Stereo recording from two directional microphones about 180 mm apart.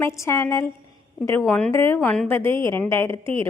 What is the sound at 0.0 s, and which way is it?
A woman's voice, 15° left (ahead or behind).